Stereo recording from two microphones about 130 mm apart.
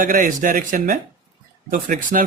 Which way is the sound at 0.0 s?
90° right.